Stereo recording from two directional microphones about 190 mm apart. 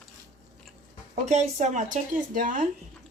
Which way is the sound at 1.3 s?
40° right (ahead or behind).